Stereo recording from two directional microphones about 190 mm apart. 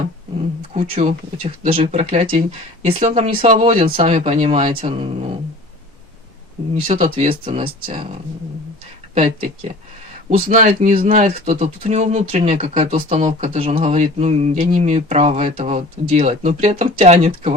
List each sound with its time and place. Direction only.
0.8 s speech: 45° right (ahead or behind)
1.4 s speech: 30° right (ahead or behind)
6.8 s speech: 30° right (ahead or behind)
9.1 s speech: 35° right (ahead or behind)
10.3 s speech: 50° right (ahead or behind)
10.7 s speech: 35° right (ahead or behind)